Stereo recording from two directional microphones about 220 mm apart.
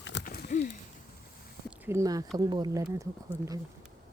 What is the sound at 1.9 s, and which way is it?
Speech, 15° right (ahead or behind).